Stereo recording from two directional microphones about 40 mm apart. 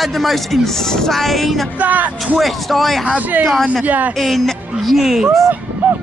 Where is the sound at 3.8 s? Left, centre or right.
Right.